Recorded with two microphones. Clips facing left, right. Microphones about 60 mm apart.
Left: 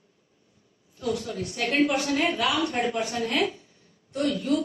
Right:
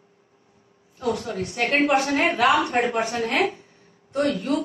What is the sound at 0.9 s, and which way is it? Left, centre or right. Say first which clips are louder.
A woman's voice: right 3 dB; right.